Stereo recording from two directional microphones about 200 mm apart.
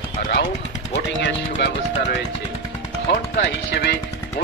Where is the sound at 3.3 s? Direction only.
60° left (ahead or behind).